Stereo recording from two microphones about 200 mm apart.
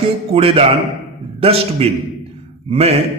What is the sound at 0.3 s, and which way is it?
A man's voice, 30° right (ahead or behind).